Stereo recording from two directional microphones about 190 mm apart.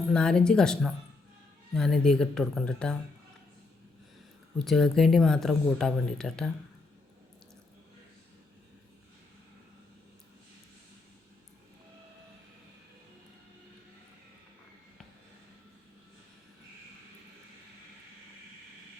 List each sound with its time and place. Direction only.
0.1 s speech: 5° left (ahead or behind)
4.6 s speech: centre (ahead or behind)